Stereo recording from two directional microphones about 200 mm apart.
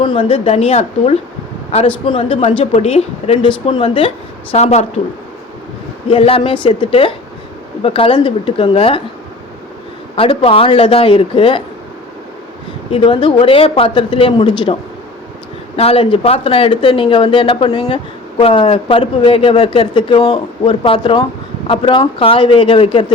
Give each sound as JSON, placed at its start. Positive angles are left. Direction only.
{"t": 0.0, "sound": "a woman's voice", "side_deg": 25}
{"t": 6.1, "sound": "speech", "side_deg": 25}
{"t": 10.2, "sound": "speech", "side_deg": 30}
{"t": 12.9, "sound": "speech", "side_deg": 25}